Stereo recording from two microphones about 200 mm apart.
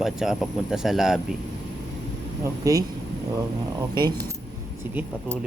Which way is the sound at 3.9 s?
20° right (ahead or behind).